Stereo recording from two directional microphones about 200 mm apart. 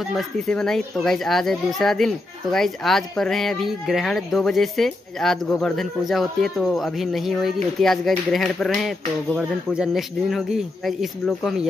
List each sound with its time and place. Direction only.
0.0 s speech: centre (ahead or behind)